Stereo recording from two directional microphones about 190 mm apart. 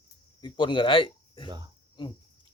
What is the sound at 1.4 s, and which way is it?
Cricket, 25° right (ahead or behind).